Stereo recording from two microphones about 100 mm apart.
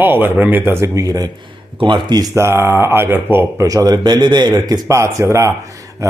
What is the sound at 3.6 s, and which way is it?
A man's voice, 40° right (ahead or behind).